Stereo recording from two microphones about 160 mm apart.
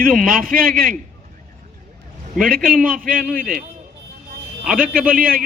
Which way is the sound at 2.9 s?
60° right (ahead or behind).